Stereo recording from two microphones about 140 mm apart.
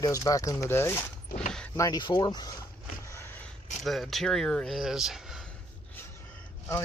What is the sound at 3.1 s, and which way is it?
Vehicle, 15° left (ahead or behind).